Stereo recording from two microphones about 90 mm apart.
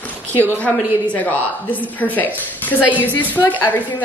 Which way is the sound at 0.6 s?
15° left (ahead or behind).